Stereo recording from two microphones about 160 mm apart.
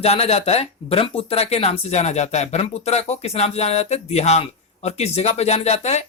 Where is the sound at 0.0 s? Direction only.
40° left (ahead or behind).